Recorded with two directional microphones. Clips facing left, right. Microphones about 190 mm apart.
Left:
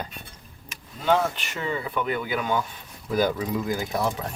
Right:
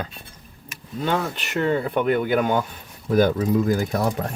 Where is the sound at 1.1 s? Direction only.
55° right (ahead or behind).